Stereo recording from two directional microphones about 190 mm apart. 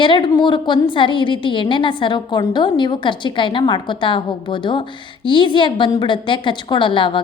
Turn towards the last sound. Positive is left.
turn(degrees=25)  # may be behind; listen again after turning